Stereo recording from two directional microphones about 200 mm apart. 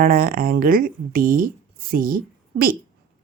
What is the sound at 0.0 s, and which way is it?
Speech, 50° right (ahead or behind).